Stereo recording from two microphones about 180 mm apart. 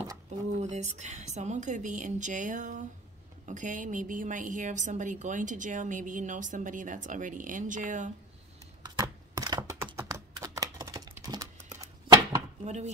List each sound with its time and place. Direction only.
0.6 s a woman's voice: 40° right (ahead or behind)
8.8 s a sound: 20° right (ahead or behind)
9.9 s typing: 15° right (ahead or behind)
12.6 s chopping: 40° right (ahead or behind)